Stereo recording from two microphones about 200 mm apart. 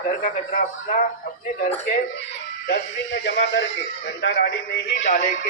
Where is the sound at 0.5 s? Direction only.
40° left (ahead or behind).